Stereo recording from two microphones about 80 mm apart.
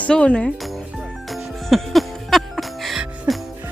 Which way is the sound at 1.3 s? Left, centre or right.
Centre.